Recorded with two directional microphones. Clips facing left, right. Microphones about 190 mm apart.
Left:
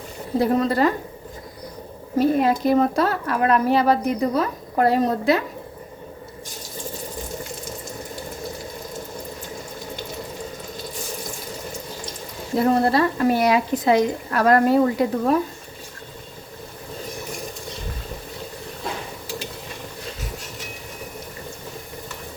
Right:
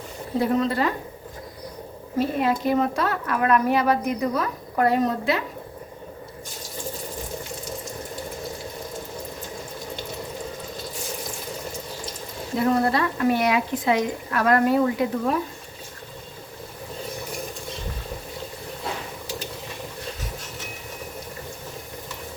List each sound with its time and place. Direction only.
0.3 s a woman's voice: 40° left (ahead or behind)
2.1 s a woman's voice: 40° left (ahead or behind)
12.6 s a woman's voice: 35° left (ahead or behind)